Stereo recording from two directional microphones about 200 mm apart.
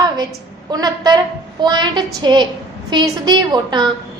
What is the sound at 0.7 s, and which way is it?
A woman's voice, 20° right (ahead or behind).